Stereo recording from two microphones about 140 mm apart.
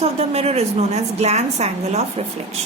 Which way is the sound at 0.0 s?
45° right (ahead or behind).